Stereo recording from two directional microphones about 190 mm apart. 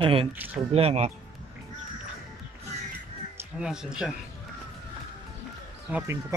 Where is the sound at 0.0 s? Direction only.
30° right (ahead or behind).